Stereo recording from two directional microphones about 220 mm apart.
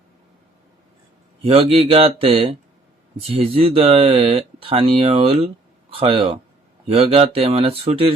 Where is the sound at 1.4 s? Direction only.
25° right (ahead or behind).